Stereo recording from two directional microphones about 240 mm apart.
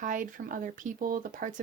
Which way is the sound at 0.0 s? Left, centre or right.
Right.